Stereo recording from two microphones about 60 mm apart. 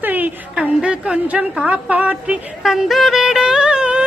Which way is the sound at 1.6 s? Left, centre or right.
Right.